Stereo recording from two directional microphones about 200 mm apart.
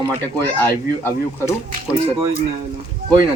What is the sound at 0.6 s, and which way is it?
Speech, 10° left (ahead or behind).